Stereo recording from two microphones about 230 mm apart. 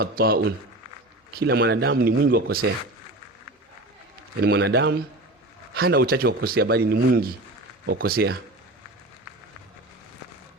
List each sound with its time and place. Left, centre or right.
0.0 s speech: right
4.4 s speech: right